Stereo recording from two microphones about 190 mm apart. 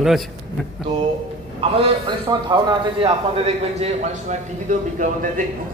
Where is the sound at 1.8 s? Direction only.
20° right (ahead or behind).